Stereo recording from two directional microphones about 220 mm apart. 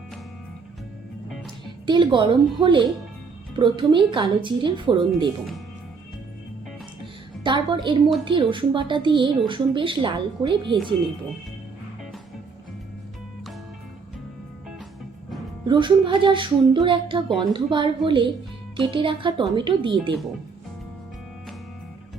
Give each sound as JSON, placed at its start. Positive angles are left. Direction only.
{"t": 1.9, "sound": "speech", "side_deg": -20}
{"t": 7.4, "sound": "speech", "side_deg": -20}
{"t": 15.6, "sound": "speech", "side_deg": -20}